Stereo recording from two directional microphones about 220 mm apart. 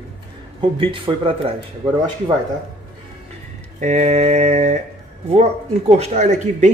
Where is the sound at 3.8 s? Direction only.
30° right (ahead or behind).